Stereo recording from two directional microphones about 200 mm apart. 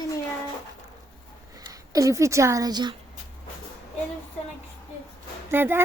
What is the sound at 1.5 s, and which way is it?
Speech, 20° right (ahead or behind).